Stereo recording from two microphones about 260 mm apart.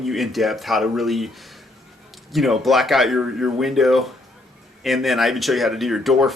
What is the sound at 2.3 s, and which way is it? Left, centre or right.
Speech, centre.